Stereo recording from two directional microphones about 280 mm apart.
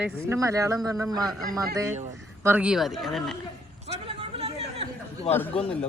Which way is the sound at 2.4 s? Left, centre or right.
Centre.